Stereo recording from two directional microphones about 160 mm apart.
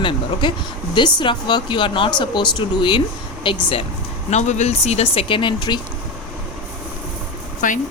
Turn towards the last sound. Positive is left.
turn(degrees=55)  # may be behind; listen again after turning